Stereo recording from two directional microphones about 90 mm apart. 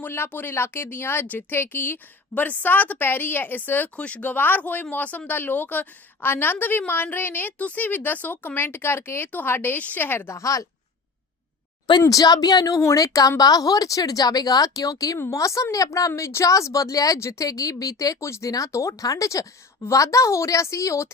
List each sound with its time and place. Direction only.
0.0 s a woman's voice: 25° left (ahead or behind); by 10.7 s 40° left (ahead or behind)
12.0 s a woman's voice: 45° left (ahead or behind)